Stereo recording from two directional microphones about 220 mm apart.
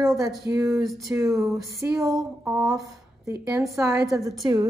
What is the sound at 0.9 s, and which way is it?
Speech, 15° right (ahead or behind).